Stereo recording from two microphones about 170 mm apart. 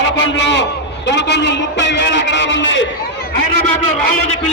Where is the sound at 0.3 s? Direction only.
90° left.